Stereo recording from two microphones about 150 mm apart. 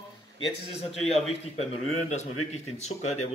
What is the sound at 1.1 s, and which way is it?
Speech, 45° left (ahead or behind).